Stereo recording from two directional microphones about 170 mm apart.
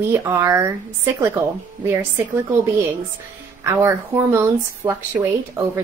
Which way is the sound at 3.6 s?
15° right (ahead or behind).